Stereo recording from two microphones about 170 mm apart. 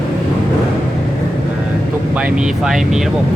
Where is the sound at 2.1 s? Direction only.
5° right (ahead or behind).